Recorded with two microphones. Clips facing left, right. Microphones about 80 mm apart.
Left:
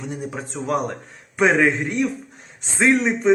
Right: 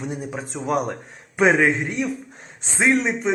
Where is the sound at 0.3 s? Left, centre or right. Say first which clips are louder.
Left 2 dB; centre.